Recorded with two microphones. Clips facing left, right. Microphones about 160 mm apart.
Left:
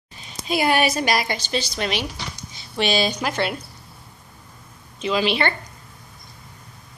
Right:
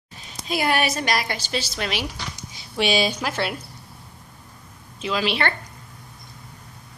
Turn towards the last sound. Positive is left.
turn(degrees=0)  # may be behind; listen again after turning